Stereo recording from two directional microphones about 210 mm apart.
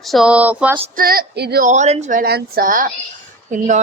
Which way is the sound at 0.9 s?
45° right (ahead or behind).